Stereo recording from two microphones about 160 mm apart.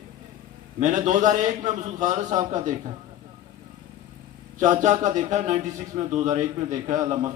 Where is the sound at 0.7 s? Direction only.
50° right (ahead or behind).